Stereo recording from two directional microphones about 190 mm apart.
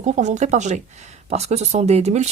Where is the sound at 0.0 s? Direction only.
40° right (ahead or behind).